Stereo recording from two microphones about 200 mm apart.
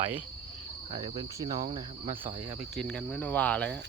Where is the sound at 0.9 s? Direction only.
20° right (ahead or behind).